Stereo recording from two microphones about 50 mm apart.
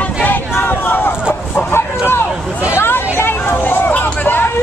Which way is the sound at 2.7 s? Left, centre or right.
Left.